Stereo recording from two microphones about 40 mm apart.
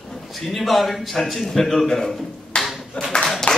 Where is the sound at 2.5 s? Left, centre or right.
Left.